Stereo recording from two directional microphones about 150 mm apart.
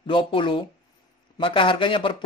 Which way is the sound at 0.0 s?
35° left (ahead or behind).